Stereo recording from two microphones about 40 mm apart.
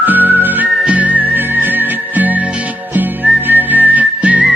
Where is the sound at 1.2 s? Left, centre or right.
Right.